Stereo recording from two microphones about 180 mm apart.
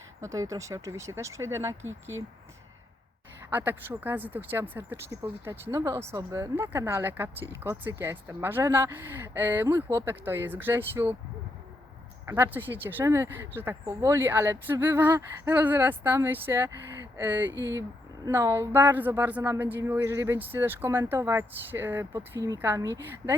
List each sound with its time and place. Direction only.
0.2 s a woman's voice: 20° right (ahead or behind)
3.5 s a woman's voice: 10° right (ahead or behind)
12.2 s a woman's voice: 10° right (ahead or behind)